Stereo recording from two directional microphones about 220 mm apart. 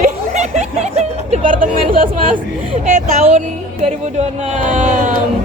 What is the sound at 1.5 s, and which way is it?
Speech, 40° right (ahead or behind).